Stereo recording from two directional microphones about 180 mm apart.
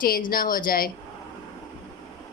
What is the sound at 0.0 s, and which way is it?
Speech, 50° left (ahead or behind).